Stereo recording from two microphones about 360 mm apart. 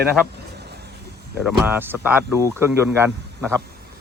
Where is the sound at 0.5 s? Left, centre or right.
Right.